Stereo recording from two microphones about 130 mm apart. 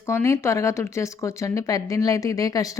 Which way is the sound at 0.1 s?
20° left (ahead or behind).